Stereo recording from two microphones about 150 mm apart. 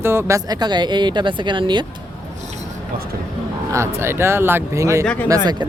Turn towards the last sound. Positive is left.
turn(degrees=10)  # may be behind; listen again after turning